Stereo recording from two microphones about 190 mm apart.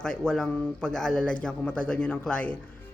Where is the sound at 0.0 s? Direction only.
5° left (ahead or behind).